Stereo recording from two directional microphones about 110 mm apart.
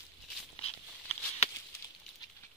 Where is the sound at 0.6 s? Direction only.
70° left (ahead or behind).